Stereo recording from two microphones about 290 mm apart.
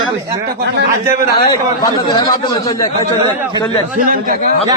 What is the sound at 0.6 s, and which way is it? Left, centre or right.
Speech, right.